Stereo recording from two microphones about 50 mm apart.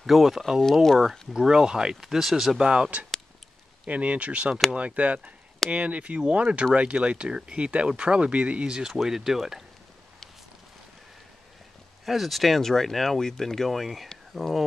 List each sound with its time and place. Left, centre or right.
0.0 s speech: centre
2.0 s speech: centre
2.6 s speech: centre
3.8 s speech: right; by 9.7 s centre
12.1 s speech: centre